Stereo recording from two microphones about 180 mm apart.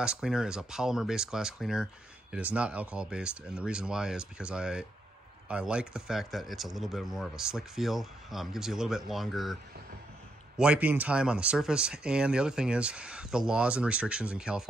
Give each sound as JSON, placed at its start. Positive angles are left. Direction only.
{"t": 0.0, "sound": "speech", "side_deg": -5}
{"t": 10.6, "sound": "speech", "side_deg": -5}